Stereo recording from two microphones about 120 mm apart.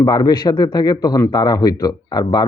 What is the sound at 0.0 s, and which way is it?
A man's voice, 30° left (ahead or behind).